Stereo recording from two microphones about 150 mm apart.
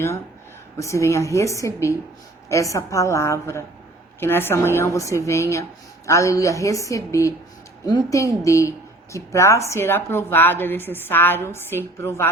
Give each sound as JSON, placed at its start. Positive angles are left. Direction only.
{"t": 0.8, "sound": "a woman's voice", "side_deg": 20}